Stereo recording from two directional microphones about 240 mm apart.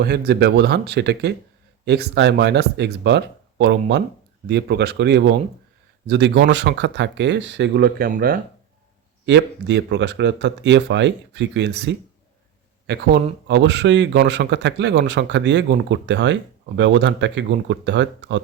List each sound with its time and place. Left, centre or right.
0.0 s speech: right
9.2 s speech: right
12.9 s speech: right